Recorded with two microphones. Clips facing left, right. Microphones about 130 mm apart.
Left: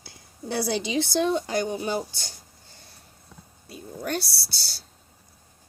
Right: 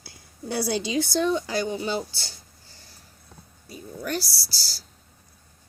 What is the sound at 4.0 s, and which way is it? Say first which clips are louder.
Speech: even; 60° left (ahead or behind).